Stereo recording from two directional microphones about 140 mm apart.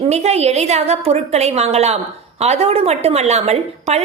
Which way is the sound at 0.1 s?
50° right (ahead or behind).